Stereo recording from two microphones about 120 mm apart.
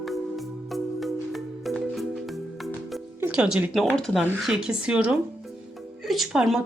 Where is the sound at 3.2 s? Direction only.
10° right (ahead or behind).